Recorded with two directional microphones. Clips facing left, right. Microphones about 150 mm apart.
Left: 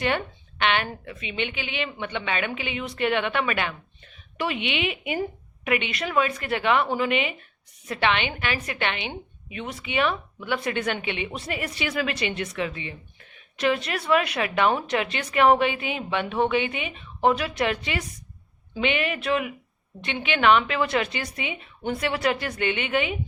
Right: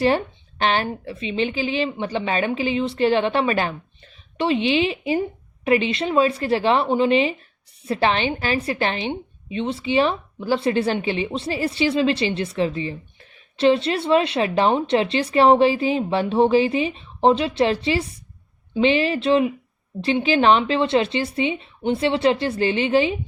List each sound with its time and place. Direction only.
0.0 s a woman's voice: 35° right (ahead or behind)